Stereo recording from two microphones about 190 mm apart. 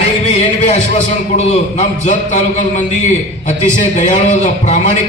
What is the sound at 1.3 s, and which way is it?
A man's voice, 35° left (ahead or behind).